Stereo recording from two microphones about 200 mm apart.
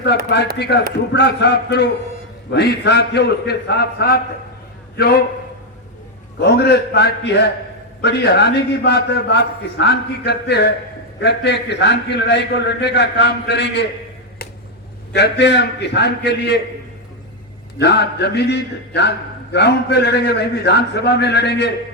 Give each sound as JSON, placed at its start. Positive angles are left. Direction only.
{"t": 0.3, "sound": "a man's voice", "side_deg": 60}
{"t": 6.4, "sound": "a man's voice", "side_deg": 55}
{"t": 15.1, "sound": "a man's voice", "side_deg": 55}
{"t": 17.7, "sound": "a man's voice", "side_deg": 55}